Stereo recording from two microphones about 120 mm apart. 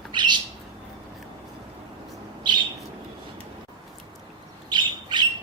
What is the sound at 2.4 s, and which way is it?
Bird, 40° right (ahead or behind).